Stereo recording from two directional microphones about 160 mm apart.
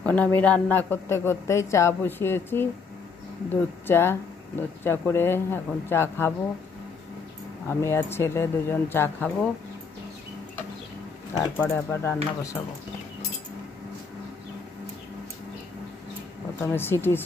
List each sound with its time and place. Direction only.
0.0 s a man's voice: 10° left (ahead or behind)
7.6 s a man's voice: 15° left (ahead or behind)
11.5 s a man's voice: 15° left (ahead or behind)
16.6 s a man's voice: 15° left (ahead or behind)